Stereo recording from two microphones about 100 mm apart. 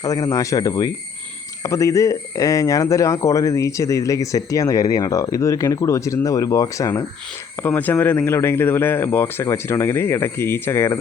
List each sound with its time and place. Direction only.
0.0 s speech: 35° left (ahead or behind)
7.6 s speech: 20° left (ahead or behind)